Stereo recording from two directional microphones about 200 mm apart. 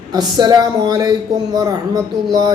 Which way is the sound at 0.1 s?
20° right (ahead or behind).